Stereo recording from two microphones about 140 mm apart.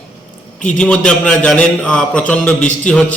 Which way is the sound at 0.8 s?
5° left (ahead or behind).